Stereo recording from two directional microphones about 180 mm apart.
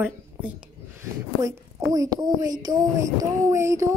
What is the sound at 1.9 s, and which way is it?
Speech, 20° right (ahead or behind).